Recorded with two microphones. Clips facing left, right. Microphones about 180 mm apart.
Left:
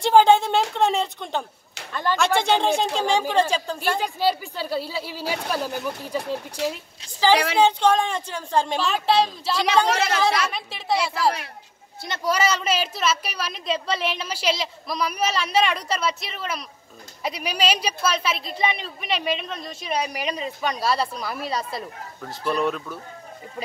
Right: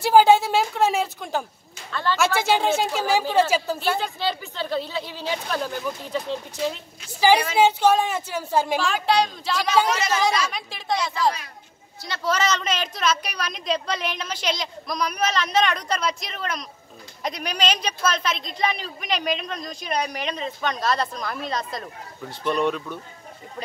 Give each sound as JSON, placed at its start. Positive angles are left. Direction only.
{"t": 0.0, "sound": "a woman's voice", "side_deg": -5}
{"t": 1.9, "sound": "speech", "side_deg": 15}
{"t": 2.1, "sound": "a woman's voice", "side_deg": -5}
{"t": 4.0, "sound": "speech", "side_deg": 10}
{"t": 6.6, "sound": "a woman's voice", "side_deg": 75}
{"t": 7.1, "sound": "a sound", "side_deg": -10}
{"t": 7.5, "sound": "a woman's voice", "side_deg": -10}